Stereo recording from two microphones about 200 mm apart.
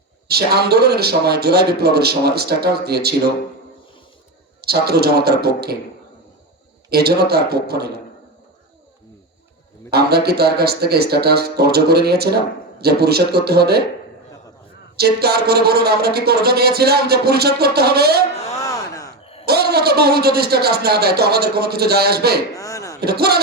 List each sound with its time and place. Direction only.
0.3 s speech: 55° right (ahead or behind)
4.6 s speech: 50° right (ahead or behind)
6.9 s speech: 50° right (ahead or behind)
9.9 s speech: 55° right (ahead or behind)
14.9 s speech: 50° right (ahead or behind)
18.5 s a sound: 15° left (ahead or behind)
19.5 s speech: 55° right (ahead or behind)
22.5 s a sound: 15° left (ahead or behind)
23.0 s speech: 50° right (ahead or behind)